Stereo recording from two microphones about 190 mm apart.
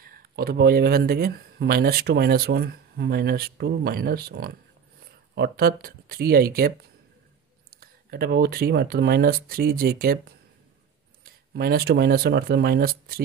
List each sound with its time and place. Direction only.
0.0 s speech: 55° right (ahead or behind)
7.8 s speech: 55° right (ahead or behind)